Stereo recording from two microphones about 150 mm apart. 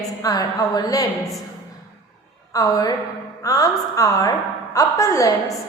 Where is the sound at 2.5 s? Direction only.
25° left (ahead or behind).